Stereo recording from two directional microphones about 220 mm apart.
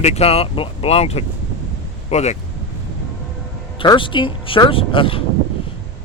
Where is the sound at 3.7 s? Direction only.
20° left (ahead or behind).